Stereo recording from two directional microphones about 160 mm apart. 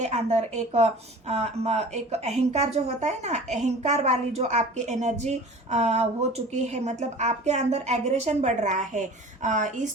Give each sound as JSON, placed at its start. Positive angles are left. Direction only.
{"t": 0.0, "sound": "a woman's voice", "side_deg": -45}